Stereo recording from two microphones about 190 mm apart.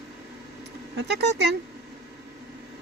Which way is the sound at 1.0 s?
60° right (ahead or behind).